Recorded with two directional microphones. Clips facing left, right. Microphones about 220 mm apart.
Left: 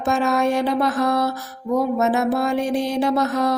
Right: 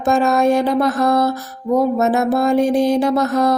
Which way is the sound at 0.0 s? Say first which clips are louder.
Right 4 dB; 40° right (ahead or behind).